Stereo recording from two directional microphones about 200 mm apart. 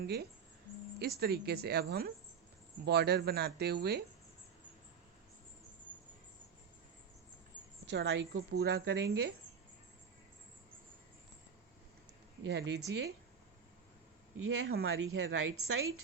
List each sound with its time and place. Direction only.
0.0 s a woman's voice: 50° right (ahead or behind)
7.9 s a woman's voice: 55° right (ahead or behind)
12.5 s a woman's voice: 55° right (ahead or behind)
14.4 s speech: 90° right